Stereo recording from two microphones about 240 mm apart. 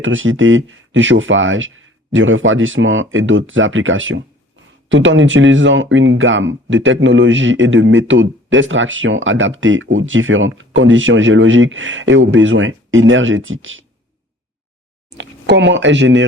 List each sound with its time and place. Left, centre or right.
0.0 s speech: right
15.2 s speech: right